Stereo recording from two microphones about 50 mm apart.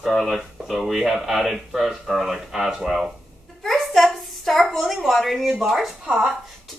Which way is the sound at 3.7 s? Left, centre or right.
Centre.